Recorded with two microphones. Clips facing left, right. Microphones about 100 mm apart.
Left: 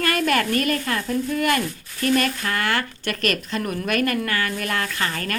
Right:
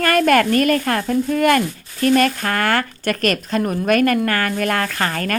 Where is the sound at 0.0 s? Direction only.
50° right (ahead or behind).